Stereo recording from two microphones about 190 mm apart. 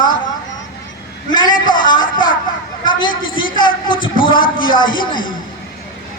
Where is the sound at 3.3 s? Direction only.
25° left (ahead or behind).